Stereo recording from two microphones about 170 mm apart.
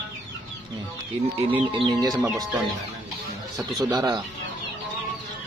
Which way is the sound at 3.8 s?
20° right (ahead or behind).